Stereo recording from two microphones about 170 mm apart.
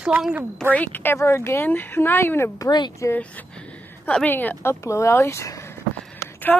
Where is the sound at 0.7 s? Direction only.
10° left (ahead or behind).